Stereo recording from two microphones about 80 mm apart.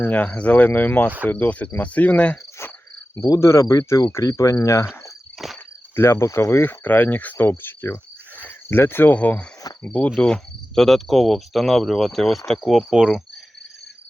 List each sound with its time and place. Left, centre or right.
0.0 s speech: left
1.3 s insect: centre
2.6 s insect: left
3.4 s speech: left
4.1 s cricket: left
4.6 s speech: left
5.4 s insect: centre
6.0 s speech: left; by 10.1 s centre
10.2 s cricket: centre